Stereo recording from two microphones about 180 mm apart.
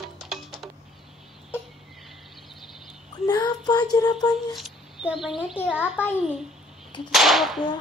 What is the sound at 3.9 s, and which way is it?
Speech, 20° left (ahead or behind).